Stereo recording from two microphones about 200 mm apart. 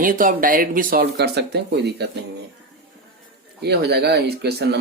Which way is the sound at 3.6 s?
55° right (ahead or behind).